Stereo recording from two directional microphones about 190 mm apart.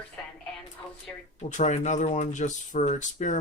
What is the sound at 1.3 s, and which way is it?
Speech, 40° left (ahead or behind).